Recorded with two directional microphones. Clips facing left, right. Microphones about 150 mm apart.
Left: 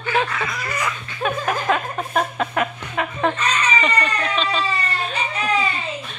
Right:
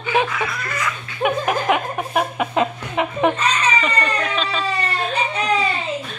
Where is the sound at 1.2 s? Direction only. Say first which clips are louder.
Right 3 dB; 15° right (ahead or behind).